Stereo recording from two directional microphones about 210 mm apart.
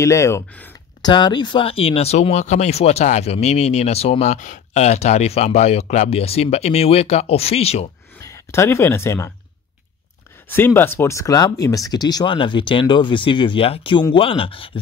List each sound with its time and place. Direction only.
0.0 s speech: 15° left (ahead or behind); by 7.9 s 30° left (ahead or behind)
8.2 s speech: 15° left (ahead or behind)
10.5 s speech: 10° left (ahead or behind); by 14.7 s 25° left (ahead or behind)